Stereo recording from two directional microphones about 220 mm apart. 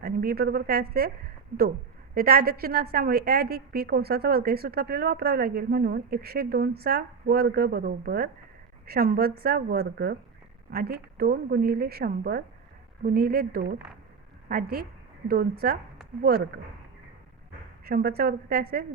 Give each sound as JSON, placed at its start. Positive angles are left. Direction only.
{"t": 0.0, "sound": "a woman's voice", "side_deg": -45}
{"t": 2.1, "sound": "a woman's voice", "side_deg": -45}
{"t": 17.8, "sound": "a woman's voice", "side_deg": -45}